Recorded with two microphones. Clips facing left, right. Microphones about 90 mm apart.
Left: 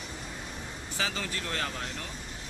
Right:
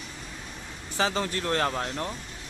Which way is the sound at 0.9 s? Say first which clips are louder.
Right 7 dB; 40° right (ahead or behind).